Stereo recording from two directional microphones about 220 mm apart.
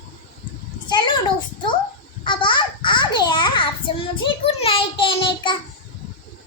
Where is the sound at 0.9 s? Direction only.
20° left (ahead or behind).